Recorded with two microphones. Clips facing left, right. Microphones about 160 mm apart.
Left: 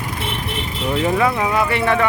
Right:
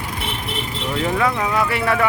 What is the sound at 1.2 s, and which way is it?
Speech, 5° left (ahead or behind).